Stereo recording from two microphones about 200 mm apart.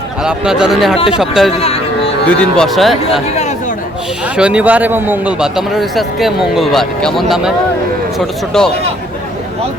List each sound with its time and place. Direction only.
0.2 s a man's voice: 5° right (ahead or behind)
1.5 s speech: 30° left (ahead or behind)
2.2 s a man's voice: 5° left (ahead or behind)
4.4 s a man's voice: 5° right (ahead or behind)
8.5 s a man's voice: 5° left (ahead or behind)